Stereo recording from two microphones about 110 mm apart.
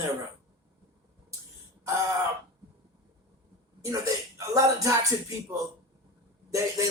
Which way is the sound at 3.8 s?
30° right (ahead or behind).